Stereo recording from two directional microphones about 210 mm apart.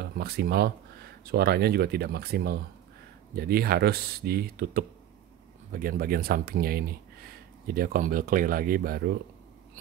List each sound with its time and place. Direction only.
0.0 s speech: 50° right (ahead or behind)